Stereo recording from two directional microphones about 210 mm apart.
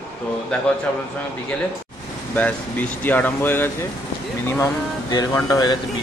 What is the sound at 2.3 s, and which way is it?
Speech, 10° left (ahead or behind).